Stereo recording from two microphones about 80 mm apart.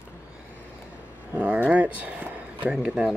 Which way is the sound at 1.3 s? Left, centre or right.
Centre.